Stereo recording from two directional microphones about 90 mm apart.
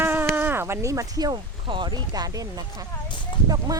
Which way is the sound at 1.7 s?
60° right (ahead or behind).